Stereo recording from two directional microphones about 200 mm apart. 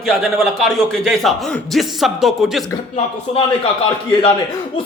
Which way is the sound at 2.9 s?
30° left (ahead or behind).